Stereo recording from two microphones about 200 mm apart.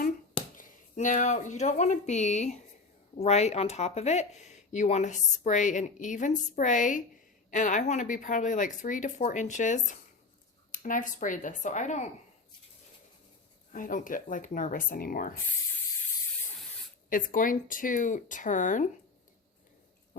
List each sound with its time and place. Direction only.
0.5 s speech: 40° left (ahead or behind)
13.7 s speech: 40° left (ahead or behind)
17.1 s speech: 45° left (ahead or behind)